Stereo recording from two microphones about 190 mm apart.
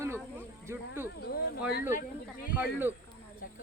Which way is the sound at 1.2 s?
55° left (ahead or behind).